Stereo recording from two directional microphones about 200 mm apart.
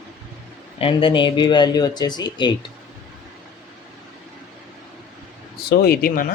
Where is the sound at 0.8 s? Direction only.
25° left (ahead or behind).